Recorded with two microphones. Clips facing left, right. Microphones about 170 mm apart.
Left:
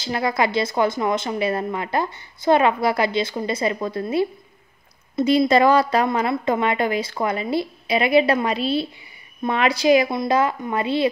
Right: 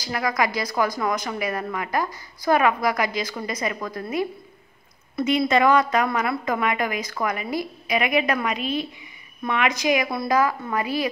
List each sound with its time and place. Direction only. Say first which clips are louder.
0.0 s a woman's voice: left 3 dB; 25° left (ahead or behind)